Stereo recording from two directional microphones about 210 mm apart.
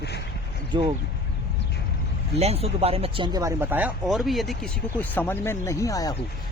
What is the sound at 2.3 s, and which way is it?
Speech, 30° right (ahead or behind).